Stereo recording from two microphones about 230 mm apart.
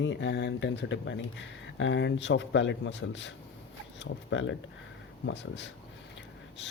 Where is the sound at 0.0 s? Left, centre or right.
Left.